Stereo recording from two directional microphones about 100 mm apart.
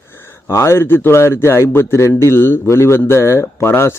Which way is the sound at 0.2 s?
25° left (ahead or behind).